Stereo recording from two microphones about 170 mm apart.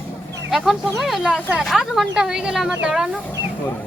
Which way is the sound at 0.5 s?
Centre (ahead or behind).